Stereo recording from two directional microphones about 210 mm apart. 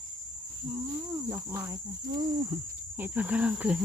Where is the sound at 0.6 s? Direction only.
15° right (ahead or behind).